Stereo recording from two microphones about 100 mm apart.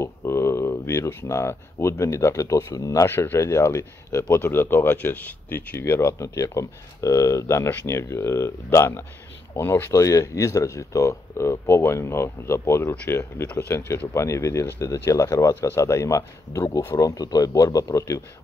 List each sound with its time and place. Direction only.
0.0 s speech: 25° left (ahead or behind)
3.1 s speech: 25° left (ahead or behind)